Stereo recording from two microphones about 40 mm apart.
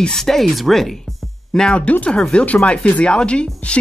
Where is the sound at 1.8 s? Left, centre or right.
Left.